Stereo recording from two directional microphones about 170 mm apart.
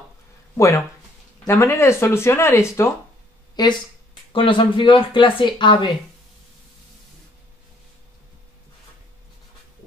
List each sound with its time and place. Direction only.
0.6 s speech: 15° left (ahead or behind)